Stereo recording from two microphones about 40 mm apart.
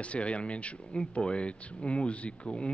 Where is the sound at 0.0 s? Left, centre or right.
Left.